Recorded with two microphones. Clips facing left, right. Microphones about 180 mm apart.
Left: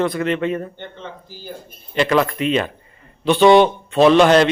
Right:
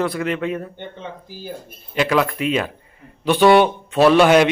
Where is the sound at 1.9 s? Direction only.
5° right (ahead or behind).